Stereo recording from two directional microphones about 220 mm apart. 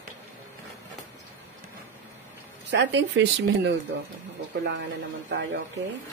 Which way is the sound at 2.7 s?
55° right (ahead or behind).